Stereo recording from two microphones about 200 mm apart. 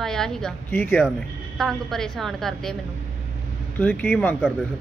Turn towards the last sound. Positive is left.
turn(degrees=0)  # may be behind; listen again after turning